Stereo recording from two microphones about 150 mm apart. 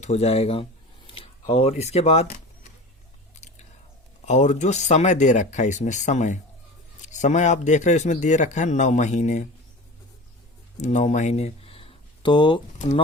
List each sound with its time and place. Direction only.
0.0 s speech: 45° left (ahead or behind)
3.3 s chewing: 50° left (ahead or behind)
4.3 s a man's voice: 50° left (ahead or behind)
10.8 s speech: 50° left (ahead or behind); by 12.6 s 30° left (ahead or behind)